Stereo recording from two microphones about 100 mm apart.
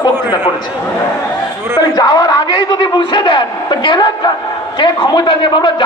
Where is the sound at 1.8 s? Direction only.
40° left (ahead or behind).